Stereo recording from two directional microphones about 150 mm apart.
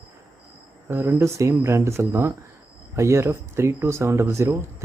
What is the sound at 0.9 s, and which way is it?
Speech, 15° right (ahead or behind).